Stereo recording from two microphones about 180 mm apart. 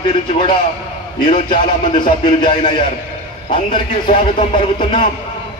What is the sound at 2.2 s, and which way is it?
Speech, 25° left (ahead or behind).